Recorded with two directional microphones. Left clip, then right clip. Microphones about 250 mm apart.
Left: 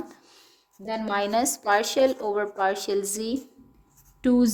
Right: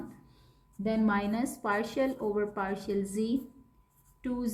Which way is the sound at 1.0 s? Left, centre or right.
Left.